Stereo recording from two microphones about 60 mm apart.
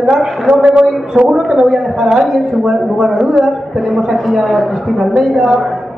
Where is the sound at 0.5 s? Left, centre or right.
Right; by 5.6 s centre.